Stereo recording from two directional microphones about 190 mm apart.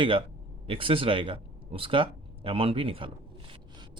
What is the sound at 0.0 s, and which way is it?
A man's voice, 30° right (ahead or behind).